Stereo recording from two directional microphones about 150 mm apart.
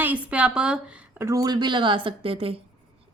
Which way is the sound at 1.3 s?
25° right (ahead or behind).